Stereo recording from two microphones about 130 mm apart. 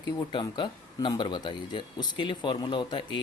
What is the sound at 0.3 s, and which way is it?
Speech, 40° left (ahead or behind).